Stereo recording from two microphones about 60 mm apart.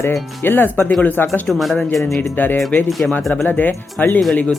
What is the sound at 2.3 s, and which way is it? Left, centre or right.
Speech, left.